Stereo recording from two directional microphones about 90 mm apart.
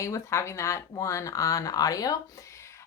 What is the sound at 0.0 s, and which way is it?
Speech, 35° left (ahead or behind).